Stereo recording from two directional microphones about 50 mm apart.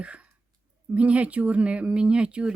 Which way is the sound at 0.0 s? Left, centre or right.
Right.